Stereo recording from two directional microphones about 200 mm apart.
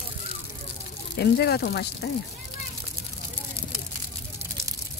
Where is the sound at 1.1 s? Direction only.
55° left (ahead or behind).